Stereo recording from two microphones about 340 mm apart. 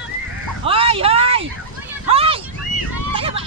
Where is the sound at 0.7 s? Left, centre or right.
Centre.